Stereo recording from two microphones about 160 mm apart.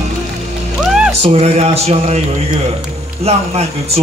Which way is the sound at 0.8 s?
5° right (ahead or behind).